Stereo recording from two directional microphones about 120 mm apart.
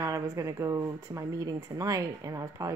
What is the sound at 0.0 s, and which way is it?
Speech, 25° right (ahead or behind).